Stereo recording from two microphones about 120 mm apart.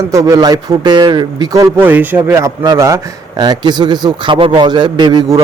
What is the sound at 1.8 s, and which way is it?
Speech, 15° right (ahead or behind).